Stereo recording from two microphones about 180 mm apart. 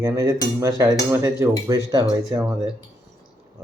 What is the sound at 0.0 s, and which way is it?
Speech, 20° right (ahead or behind).